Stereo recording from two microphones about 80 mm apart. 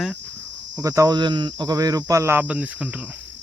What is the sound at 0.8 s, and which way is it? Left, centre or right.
Speech, right.